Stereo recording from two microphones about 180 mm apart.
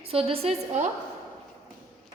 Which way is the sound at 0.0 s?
30° right (ahead or behind).